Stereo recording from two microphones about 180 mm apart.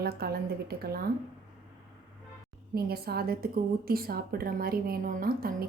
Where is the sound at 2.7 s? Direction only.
60° right (ahead or behind).